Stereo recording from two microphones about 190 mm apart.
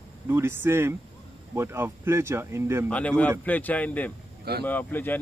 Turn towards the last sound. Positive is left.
turn(degrees=10)  # may be behind; listen again after turning